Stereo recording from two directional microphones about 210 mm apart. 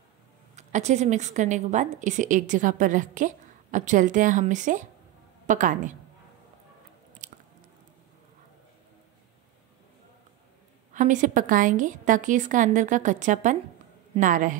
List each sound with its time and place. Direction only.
0.6 s a woman's voice: 35° right (ahead or behind)
7.2 s biting: 35° right (ahead or behind)
10.9 s a woman's voice: 35° right (ahead or behind)